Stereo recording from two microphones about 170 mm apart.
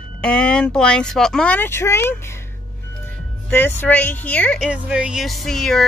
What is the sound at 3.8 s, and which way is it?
Speech, 10° left (ahead or behind).